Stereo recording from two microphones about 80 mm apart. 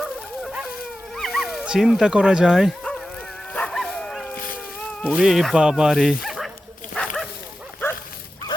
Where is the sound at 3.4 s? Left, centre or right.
Centre.